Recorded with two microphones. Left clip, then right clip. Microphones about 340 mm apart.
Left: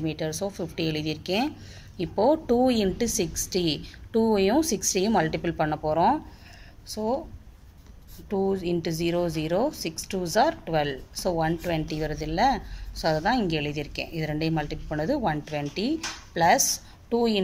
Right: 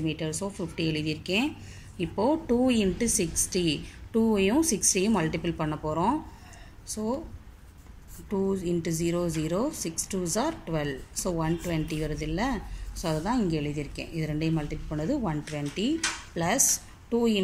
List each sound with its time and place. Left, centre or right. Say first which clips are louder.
0.0 s a woman's voice: left 2 dB; left
8.3 s a woman's voice: left 3 dB; left